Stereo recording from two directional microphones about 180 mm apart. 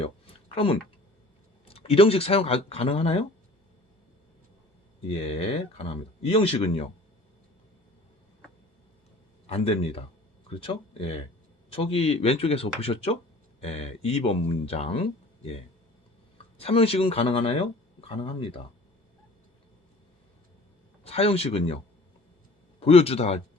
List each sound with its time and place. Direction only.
0.0 s a sound: 30° left (ahead or behind)
1.6 s speech: 30° left (ahead or behind)
5.2 s speech: 30° left (ahead or behind)
9.5 s speech: 30° left (ahead or behind)
16.6 s speech: 30° left (ahead or behind)
21.0 s speech: 35° left (ahead or behind)
22.8 s speech: 35° left (ahead or behind)